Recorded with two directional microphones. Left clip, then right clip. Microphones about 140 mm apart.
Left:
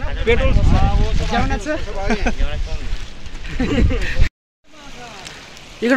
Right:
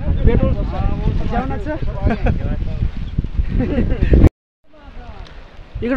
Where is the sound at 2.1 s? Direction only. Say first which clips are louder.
Even; 65° right (ahead or behind).